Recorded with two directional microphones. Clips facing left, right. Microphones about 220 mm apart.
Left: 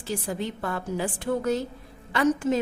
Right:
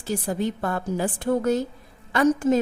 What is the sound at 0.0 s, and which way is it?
A woman's voice, 45° right (ahead or behind).